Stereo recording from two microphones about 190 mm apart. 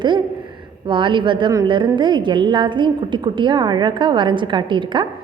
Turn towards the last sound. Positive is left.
turn(degrees=-25)  # may be behind; listen again after turning